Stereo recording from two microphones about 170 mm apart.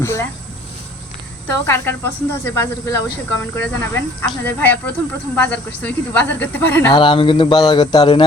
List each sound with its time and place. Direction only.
0.0 s speech: 15° left (ahead or behind)
1.6 s speech: 15° left (ahead or behind)
6.9 s speech: 30° left (ahead or behind)